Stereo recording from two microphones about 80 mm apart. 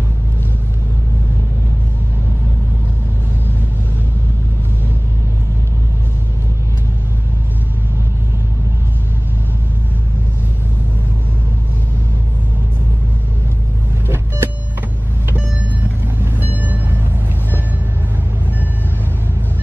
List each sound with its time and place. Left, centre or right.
14.0 s vehicle: right
16.3 s vehicle: right